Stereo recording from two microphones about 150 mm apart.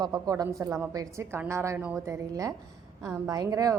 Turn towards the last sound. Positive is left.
turn(degrees=-25)  # may be behind; listen again after turning